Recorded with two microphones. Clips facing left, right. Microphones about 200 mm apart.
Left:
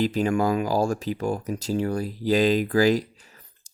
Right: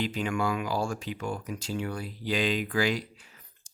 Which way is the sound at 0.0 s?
40° left (ahead or behind).